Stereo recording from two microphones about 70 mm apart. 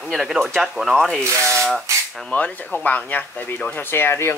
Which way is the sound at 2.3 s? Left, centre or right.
Left.